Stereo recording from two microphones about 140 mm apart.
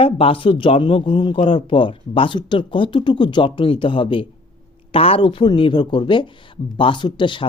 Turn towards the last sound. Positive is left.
turn(degrees=35)  # may be behind; listen again after turning